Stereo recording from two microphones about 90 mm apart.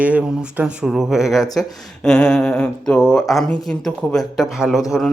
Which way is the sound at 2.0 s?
10° left (ahead or behind).